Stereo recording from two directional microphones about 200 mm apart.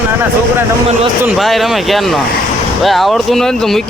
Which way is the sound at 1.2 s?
Centre (ahead or behind).